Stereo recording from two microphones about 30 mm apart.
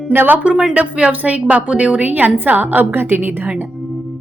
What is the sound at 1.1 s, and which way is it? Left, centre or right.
Speech, right.